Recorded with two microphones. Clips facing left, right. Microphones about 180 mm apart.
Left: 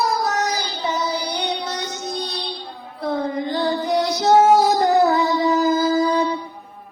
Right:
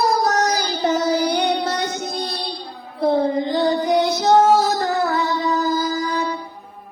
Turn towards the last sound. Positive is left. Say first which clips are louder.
# left 5 dB
turn(degrees=30)  # may be behind; listen again after turning